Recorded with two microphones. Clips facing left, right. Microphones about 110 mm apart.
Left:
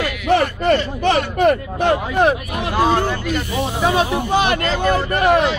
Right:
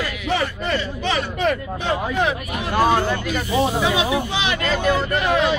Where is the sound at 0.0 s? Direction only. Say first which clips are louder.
Left 6 dB; 55° left (ahead or behind).